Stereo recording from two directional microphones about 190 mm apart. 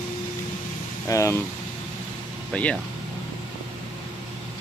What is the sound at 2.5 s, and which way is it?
Speech, 5° left (ahead or behind).